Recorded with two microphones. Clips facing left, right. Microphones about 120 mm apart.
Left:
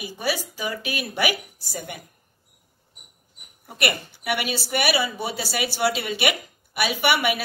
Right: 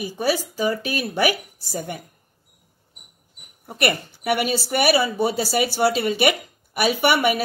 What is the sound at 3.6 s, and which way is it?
Speech, 40° right (ahead or behind).